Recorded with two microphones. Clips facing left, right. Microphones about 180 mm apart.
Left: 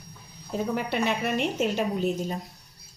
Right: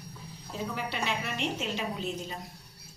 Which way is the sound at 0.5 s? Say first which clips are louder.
Left 8 dB; 55° left (ahead or behind).